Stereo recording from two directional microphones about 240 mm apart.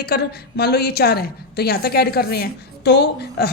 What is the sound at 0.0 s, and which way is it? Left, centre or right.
A woman's voice, left.